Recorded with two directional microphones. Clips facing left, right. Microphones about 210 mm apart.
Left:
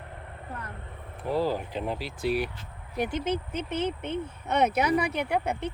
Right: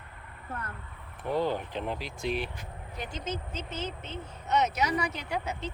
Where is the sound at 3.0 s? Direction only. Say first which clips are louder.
Left 8 dB; 60° left (ahead or behind).